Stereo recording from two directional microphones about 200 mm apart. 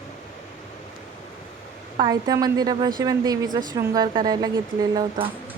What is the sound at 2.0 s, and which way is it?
A woman's voice, 20° right (ahead or behind).